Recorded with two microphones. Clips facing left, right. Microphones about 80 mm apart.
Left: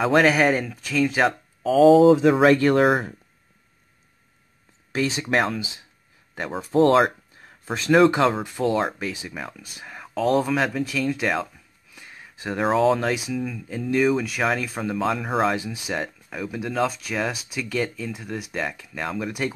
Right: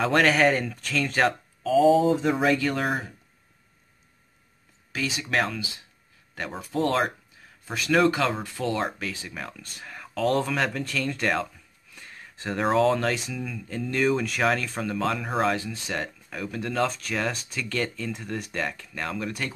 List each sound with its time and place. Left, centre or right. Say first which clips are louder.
0.0 s speech: left 3 dB; centre
1.7 s speech: left 6 dB; left
2.5 s speech: left 8 dB; left
4.9 s speech: left 6 dB; left
5.3 s speech: left 2 dB; centre
7.6 s speech: left 5 dB; left; by 19.4 s centre